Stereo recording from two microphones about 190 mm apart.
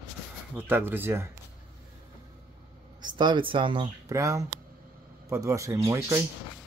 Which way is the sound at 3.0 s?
25° right (ahead or behind).